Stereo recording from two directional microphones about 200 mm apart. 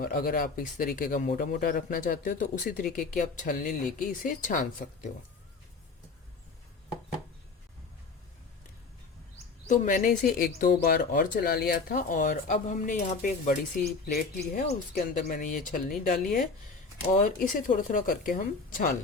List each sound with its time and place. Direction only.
0.0 s speech: 45° left (ahead or behind)
9.6 s speech: 40° left (ahead or behind)